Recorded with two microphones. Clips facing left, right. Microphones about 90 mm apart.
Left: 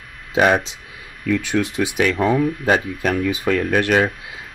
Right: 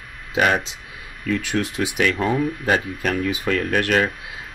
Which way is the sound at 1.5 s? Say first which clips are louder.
Left 3 dB; 25° left (ahead or behind).